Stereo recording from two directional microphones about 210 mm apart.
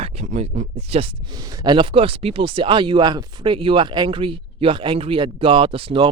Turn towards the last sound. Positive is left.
turn(degrees=-25)  # may be behind; listen again after turning